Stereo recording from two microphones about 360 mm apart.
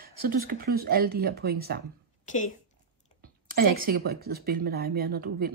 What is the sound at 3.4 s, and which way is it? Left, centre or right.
Speech, right.